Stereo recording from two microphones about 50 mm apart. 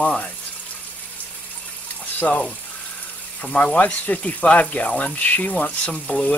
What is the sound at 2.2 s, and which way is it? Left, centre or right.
Speech, left.